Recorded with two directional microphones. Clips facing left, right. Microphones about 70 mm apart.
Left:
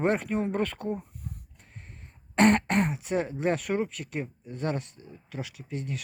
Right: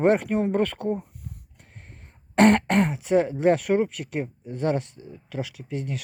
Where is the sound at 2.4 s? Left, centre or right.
Right.